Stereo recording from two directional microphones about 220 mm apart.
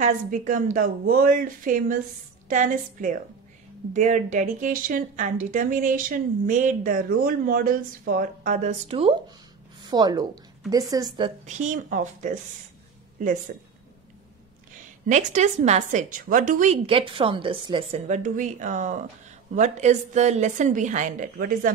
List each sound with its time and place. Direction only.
0.0 s a woman's voice: 35° right (ahead or behind); by 11.3 s 20° right (ahead or behind)
11.4 s speech: 35° right (ahead or behind)
13.5 s speech: 40° right (ahead or behind)
15.0 s speech: 35° right (ahead or behind)